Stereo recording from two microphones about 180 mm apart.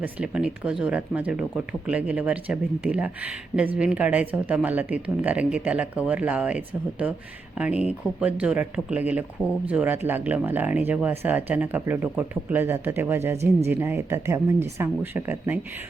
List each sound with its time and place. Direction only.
0.0 s speech: 5° right (ahead or behind)
13.3 s speech: 35° right (ahead or behind)
13.7 s speech: 10° right (ahead or behind)